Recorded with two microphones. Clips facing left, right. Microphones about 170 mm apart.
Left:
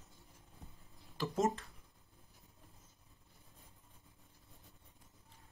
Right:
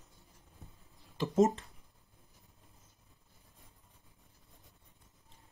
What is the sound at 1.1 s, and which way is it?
Speech, 20° right (ahead or behind).